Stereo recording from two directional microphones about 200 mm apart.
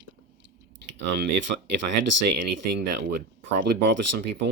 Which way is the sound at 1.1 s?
65° right (ahead or behind).